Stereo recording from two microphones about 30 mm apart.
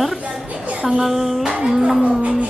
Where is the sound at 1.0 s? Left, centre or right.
Centre.